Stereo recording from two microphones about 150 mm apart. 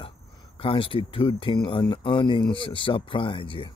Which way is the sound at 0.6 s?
35° left (ahead or behind).